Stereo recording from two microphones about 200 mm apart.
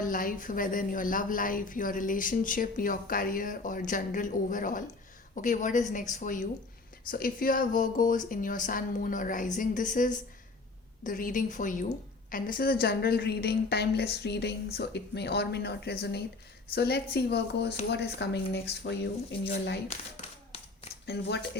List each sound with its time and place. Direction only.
0.0 s a woman's voice: 45° left (ahead or behind)
21.1 s speech: 55° left (ahead or behind)